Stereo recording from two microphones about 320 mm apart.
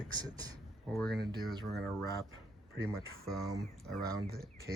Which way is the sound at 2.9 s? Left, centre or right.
Centre.